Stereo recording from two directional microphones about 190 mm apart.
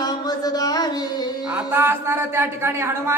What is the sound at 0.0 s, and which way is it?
Music, 20° left (ahead or behind).